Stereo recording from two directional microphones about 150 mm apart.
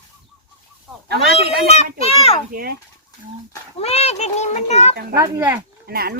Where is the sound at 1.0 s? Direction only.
90° right.